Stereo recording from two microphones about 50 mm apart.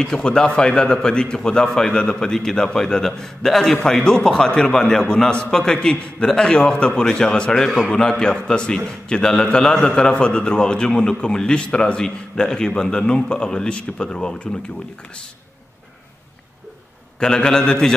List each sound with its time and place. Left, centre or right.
0.0 s a man's voice: centre
17.2 s a man's voice: centre